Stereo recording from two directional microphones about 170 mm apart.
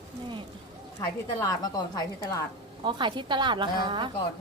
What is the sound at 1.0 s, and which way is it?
A woman's voice, 20° left (ahead or behind).